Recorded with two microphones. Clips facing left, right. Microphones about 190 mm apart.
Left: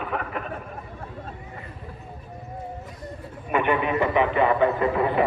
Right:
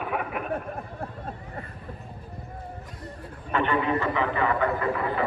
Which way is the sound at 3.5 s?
15° left (ahead or behind).